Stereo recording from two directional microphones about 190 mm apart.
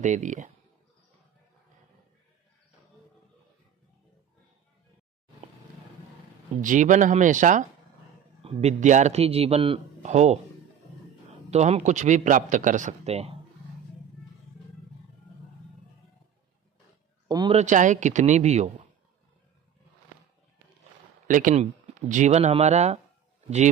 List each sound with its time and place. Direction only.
0.0 s a man's voice: 40° right (ahead or behind)
6.6 s a man's voice: 40° right (ahead or behind)
11.5 s a man's voice: 35° right (ahead or behind)
17.3 s speech: 20° right (ahead or behind)
17.6 s a man's voice: 40° right (ahead or behind)
21.3 s a man's voice: 45° right (ahead or behind)